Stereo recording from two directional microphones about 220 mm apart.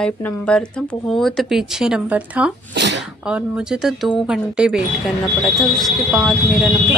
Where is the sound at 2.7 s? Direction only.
50° right (ahead or behind).